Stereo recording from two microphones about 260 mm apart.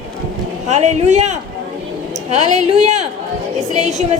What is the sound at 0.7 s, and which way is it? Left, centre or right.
Music, right.